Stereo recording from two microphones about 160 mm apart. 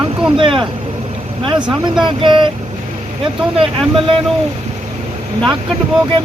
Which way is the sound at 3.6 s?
35° right (ahead or behind).